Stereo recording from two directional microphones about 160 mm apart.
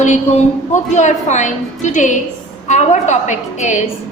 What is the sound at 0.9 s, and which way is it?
A woman's voice, 50° left (ahead or behind).